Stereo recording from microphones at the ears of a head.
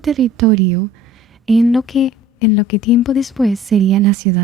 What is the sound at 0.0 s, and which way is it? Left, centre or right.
A woman's voice, right.